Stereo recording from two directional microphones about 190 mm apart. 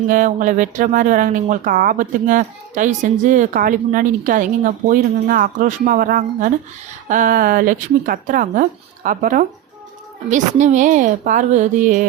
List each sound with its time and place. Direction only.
0.1 s a woman's voice: 45° right (ahead or behind)